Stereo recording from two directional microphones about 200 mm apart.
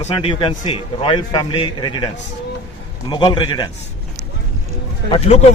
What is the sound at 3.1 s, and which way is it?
Speech, 25° left (ahead or behind).